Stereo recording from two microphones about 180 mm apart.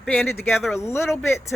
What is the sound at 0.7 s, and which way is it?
Speech, 15° left (ahead or behind).